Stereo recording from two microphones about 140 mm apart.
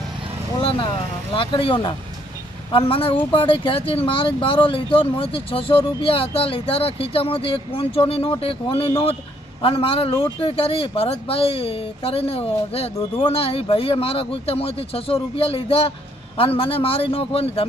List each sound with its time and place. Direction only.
1.3 s speech: 40° left (ahead or behind)